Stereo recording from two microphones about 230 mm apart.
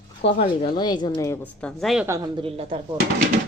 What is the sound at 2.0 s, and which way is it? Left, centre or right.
Speech, centre.